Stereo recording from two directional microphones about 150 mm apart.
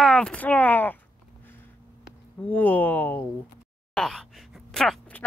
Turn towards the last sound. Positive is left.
turn(degrees=5)  # may be behind; listen again after turning